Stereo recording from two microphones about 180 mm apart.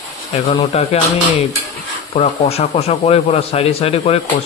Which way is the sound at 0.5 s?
35° left (ahead or behind).